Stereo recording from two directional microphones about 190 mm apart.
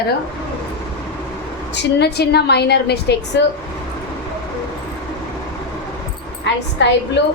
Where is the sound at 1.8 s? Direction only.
60° left (ahead or behind).